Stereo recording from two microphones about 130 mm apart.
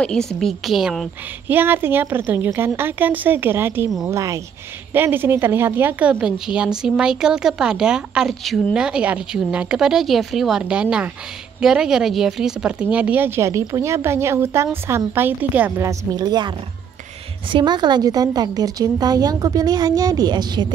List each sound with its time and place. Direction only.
0.0 s a woman's voice: 5° left (ahead or behind)
1.5 s speech: 15° right (ahead or behind)
15.9 s a woman's voice: 30° right (ahead or behind)